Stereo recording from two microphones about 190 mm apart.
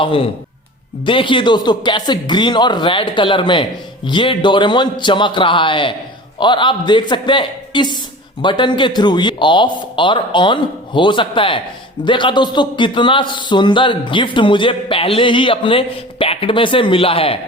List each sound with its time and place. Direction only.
0.0 s a man's voice: 30° left (ahead or behind)